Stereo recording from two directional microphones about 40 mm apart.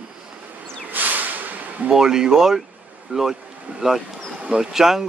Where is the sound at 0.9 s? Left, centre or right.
Right.